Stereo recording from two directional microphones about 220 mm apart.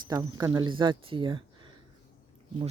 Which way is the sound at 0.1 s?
15° right (ahead or behind).